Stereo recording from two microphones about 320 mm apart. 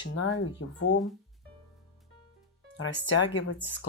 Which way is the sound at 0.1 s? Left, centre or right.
Left.